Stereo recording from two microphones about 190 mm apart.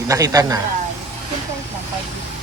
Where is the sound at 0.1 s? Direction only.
20° right (ahead or behind).